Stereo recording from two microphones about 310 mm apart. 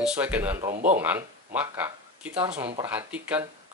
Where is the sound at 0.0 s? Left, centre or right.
Centre.